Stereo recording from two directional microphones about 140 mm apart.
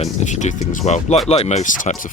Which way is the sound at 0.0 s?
55° left (ahead or behind).